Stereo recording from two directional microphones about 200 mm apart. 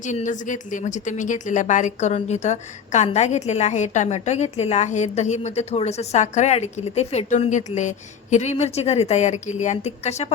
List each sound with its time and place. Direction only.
0.0 s a woman's voice: 40° left (ahead or behind)